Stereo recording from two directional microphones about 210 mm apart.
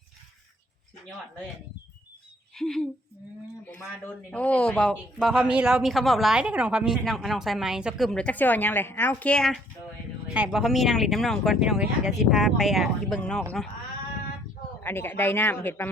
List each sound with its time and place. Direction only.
2.6 s speech: centre (ahead or behind)
14.8 s speech: 10° left (ahead or behind)